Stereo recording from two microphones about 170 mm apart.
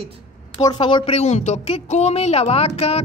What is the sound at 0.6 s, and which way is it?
A woman's voice, 25° left (ahead or behind).